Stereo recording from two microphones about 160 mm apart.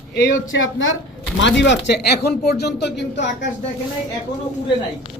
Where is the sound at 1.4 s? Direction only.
90° left.